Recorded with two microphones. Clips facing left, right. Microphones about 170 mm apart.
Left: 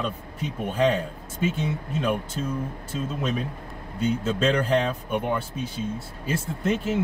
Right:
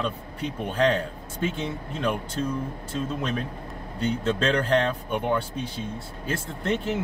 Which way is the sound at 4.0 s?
10° left (ahead or behind).